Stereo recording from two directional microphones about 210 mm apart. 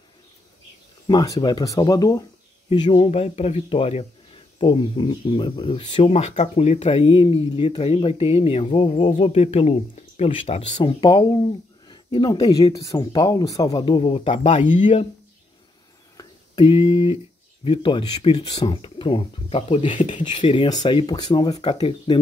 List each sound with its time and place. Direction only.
1.0 s speech: 20° left (ahead or behind)
16.2 s a sound: 25° left (ahead or behind)
17.6 s speech: 25° left (ahead or behind)
20.2 s speech: 25° left (ahead or behind)